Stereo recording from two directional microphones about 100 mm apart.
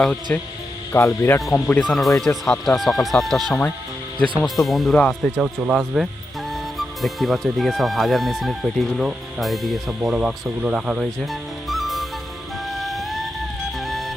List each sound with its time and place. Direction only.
0.3 s speech: 20° left (ahead or behind)
0.9 s speech: 30° left (ahead or behind)
1.4 s speech: centre (ahead or behind)
5.2 s speech: 10° left (ahead or behind)
5.7 s speech: centre (ahead or behind)
12.7 s music: centre (ahead or behind)